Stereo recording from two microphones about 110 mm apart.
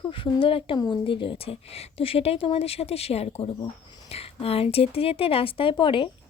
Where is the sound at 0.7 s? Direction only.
40° left (ahead or behind).